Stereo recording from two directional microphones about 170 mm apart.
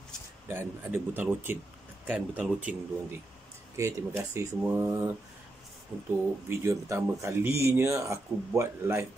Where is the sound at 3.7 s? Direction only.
20° right (ahead or behind).